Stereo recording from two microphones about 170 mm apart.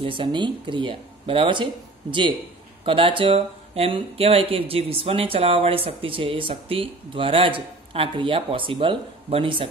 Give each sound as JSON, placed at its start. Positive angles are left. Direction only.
{"t": 0.0, "sound": "speech", "side_deg": -30}